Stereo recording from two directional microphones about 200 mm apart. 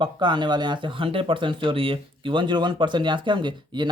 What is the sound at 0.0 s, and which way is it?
Speech, 20° right (ahead or behind).